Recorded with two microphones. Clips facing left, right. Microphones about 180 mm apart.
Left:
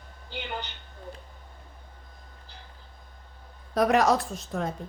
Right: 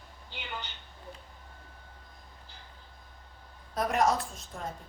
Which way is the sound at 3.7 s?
80° left.